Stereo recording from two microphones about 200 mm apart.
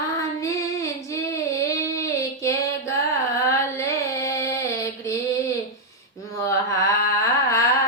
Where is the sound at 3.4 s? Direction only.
15° left (ahead or behind).